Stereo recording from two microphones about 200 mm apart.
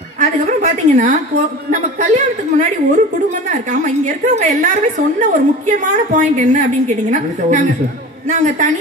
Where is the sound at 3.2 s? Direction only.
35° right (ahead or behind).